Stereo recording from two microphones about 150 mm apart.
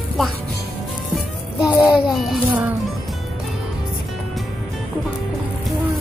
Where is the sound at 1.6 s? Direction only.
20° left (ahead or behind).